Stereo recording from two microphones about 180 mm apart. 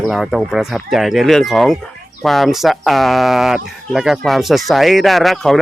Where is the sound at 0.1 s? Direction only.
Centre (ahead or behind).